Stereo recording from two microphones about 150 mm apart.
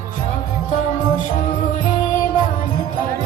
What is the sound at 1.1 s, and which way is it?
Music, 60° left (ahead or behind).